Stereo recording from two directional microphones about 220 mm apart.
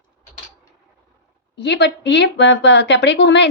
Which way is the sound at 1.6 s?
50° left (ahead or behind).